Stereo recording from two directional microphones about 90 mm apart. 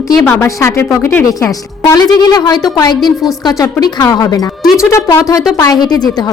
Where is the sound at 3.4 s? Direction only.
50° left (ahead or behind); by 5.0 s 35° left (ahead or behind).